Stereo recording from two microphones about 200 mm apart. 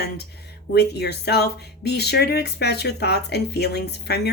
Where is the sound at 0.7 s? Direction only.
55° left (ahead or behind).